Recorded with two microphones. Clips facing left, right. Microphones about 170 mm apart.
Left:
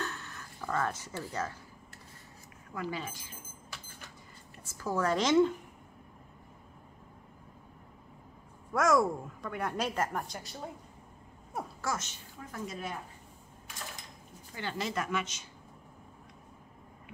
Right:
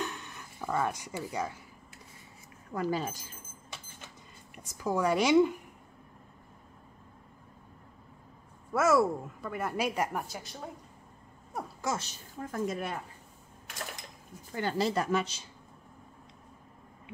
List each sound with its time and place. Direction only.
0.0 s music: 15° right (ahead or behind)
2.7 s speech: 40° right (ahead or behind)
4.6 s speech: 15° right (ahead or behind)
8.7 s a woman's voice: 5° right (ahead or behind)
12.0 s a woman's voice: 40° right (ahead or behind)
14.5 s speech: 45° right (ahead or behind)